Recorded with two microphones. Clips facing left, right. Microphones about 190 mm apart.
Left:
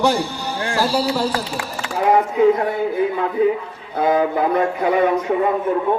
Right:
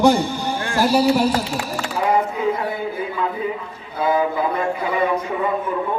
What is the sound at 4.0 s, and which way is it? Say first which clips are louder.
Speech: left 2 dB; 65° left (ahead or behind).